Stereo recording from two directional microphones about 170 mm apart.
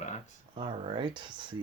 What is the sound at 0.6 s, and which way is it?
Speech, 30° right (ahead or behind).